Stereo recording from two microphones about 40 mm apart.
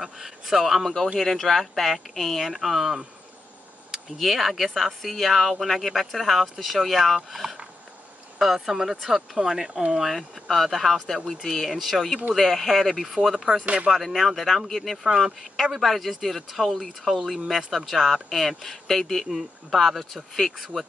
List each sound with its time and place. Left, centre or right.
0.0 s speech: centre
1.2 s speech: centre
13.7 s speech: right
13.9 s speech: centre
15.0 s speech: centre